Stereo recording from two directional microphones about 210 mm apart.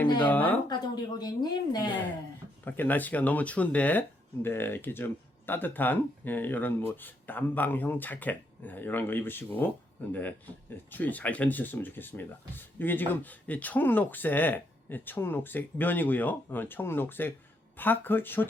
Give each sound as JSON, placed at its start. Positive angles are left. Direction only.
{"t": 0.2, "sound": "speech", "side_deg": 5}
{"t": 1.2, "sound": "speech", "side_deg": 20}
{"t": 2.6, "sound": "speech", "side_deg": 10}